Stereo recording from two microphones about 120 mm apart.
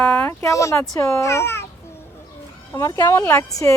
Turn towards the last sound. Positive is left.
turn(degrees=25)  # may be behind; listen again after turning